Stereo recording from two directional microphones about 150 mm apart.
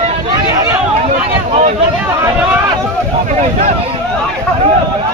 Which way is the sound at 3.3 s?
50° right (ahead or behind).